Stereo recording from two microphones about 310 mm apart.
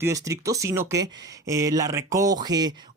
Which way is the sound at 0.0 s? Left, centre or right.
Centre.